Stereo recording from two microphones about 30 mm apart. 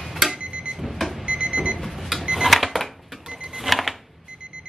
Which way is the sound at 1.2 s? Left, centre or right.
Right.